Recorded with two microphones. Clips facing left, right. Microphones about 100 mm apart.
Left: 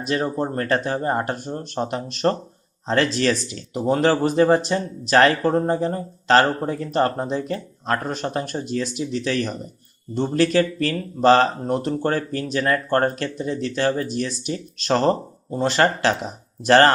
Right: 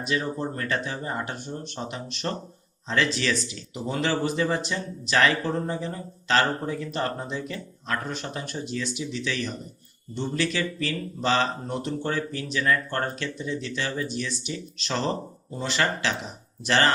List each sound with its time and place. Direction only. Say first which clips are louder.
0.0 s speech: left 5 dB; 40° left (ahead or behind)